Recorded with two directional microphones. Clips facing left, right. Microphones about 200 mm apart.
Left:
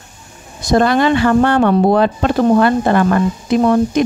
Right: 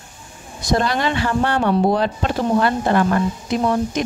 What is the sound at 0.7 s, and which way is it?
Speech, 55° left (ahead or behind).